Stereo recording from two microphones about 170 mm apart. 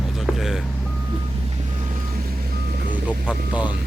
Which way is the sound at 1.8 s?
55° right (ahead or behind).